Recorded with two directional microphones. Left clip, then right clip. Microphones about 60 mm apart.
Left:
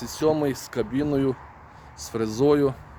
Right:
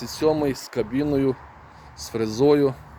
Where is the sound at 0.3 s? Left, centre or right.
Left.